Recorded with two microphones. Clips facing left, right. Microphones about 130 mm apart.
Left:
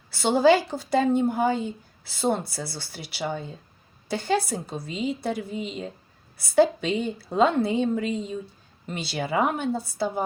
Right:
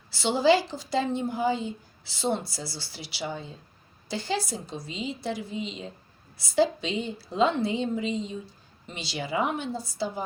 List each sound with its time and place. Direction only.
0.1 s a woman's voice: 50° left (ahead or behind)